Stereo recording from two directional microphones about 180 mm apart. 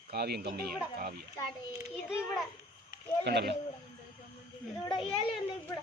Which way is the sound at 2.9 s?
70° right (ahead or behind).